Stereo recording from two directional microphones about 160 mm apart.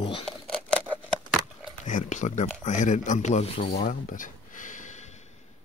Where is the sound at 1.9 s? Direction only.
50° left (ahead or behind).